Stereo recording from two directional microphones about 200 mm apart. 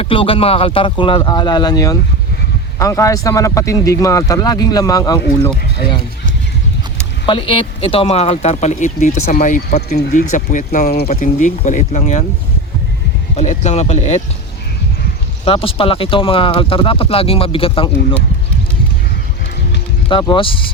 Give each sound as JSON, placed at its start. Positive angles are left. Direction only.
{"t": 0.0, "sound": "speech", "side_deg": 25}
{"t": 7.3, "sound": "speech", "side_deg": 25}
{"t": 10.3, "sound": "speech", "side_deg": 40}
{"t": 13.3, "sound": "speech", "side_deg": 35}
{"t": 15.4, "sound": "speech", "side_deg": 25}
{"t": 20.1, "sound": "speech", "side_deg": 25}